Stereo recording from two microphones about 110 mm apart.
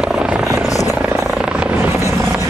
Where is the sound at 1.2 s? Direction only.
5° right (ahead or behind); by 2.4 s 25° right (ahead or behind).